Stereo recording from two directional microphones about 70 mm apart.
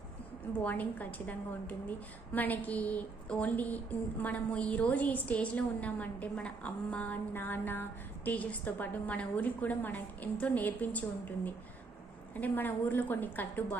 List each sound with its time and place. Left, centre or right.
0.6 s a woman's voice: left
12.4 s a woman's voice: left